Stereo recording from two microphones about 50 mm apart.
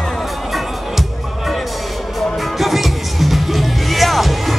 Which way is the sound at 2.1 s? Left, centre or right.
Centre.